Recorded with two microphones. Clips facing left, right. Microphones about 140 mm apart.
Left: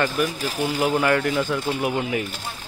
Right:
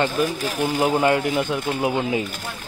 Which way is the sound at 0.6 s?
35° right (ahead or behind).